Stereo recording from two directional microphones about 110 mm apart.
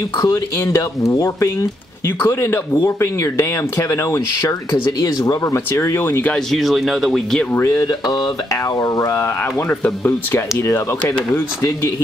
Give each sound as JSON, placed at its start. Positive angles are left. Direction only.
{"t": 0.2, "sound": "speech", "side_deg": 30}
{"t": 6.3, "sound": "speech", "side_deg": 0}
{"t": 7.5, "sound": "speech", "side_deg": 30}